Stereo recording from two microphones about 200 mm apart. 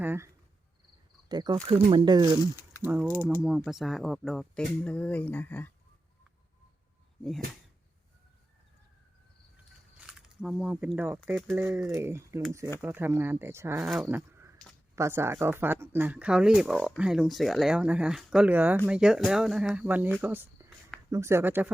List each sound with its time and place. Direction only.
0.0 s speech: 10° right (ahead or behind)
1.3 s speech: 20° right (ahead or behind)
2.4 s speech: 20° left (ahead or behind)
2.8 s speech: 5° right (ahead or behind); by 5.7 s 10° left (ahead or behind)
10.1 s speech: 5° right (ahead or behind)
11.5 s speech: 10° right (ahead or behind)
13.9 s speech: centre (ahead or behind)
14.9 s speech: 15° right (ahead or behind)